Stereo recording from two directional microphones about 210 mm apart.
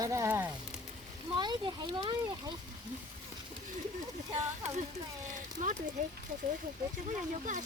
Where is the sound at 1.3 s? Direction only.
20° right (ahead or behind).